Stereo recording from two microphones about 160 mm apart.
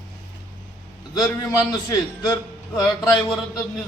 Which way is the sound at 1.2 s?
25° left (ahead or behind).